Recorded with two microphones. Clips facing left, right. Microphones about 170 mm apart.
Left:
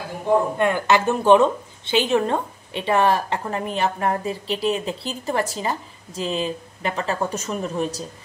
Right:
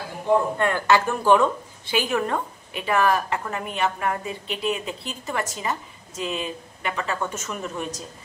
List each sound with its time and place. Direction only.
0.6 s a woman's voice: 15° left (ahead or behind); by 8.0 s 35° left (ahead or behind)